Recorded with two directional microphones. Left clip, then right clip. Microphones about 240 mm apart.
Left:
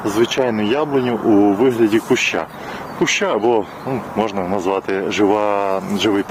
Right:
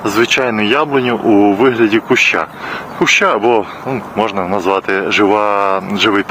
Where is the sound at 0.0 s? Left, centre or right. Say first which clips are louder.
Right 4 dB; centre.